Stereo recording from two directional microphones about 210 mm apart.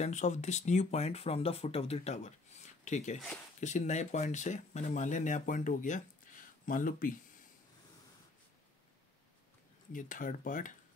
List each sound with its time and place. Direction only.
0.0 s speech: 35° left (ahead or behind)
9.9 s speech: 40° left (ahead or behind)